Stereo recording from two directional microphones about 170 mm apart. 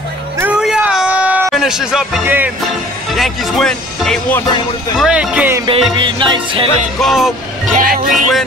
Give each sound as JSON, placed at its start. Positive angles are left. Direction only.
{"t": 0.4, "sound": "a sound", "side_deg": -5}
{"t": 3.2, "sound": "speech", "side_deg": 0}
{"t": 5.7, "sound": "music", "side_deg": -30}
{"t": 7.0, "sound": "speech", "side_deg": 0}
{"t": 7.7, "sound": "speech", "side_deg": -55}